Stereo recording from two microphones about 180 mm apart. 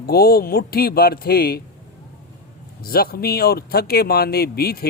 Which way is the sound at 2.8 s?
55° left (ahead or behind).